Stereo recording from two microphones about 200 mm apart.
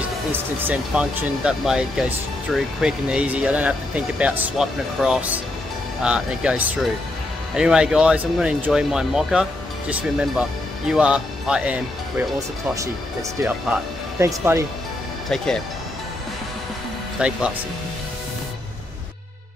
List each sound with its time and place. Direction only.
0.3 s speech: 10° right (ahead or behind)
12.4 s speech: 15° right (ahead or behind)
14.2 s speech: 15° right (ahead or behind)
15.2 s speech: 5° left (ahead or behind)
17.2 s speech: 5° right (ahead or behind)